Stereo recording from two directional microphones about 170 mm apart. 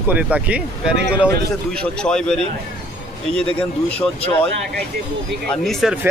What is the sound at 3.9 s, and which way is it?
Speech, 10° left (ahead or behind).